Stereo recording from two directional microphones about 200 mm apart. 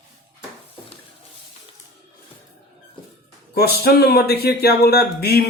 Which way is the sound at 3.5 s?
50° left (ahead or behind).